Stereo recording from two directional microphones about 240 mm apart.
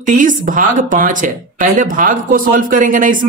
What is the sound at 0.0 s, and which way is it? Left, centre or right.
Speech, right.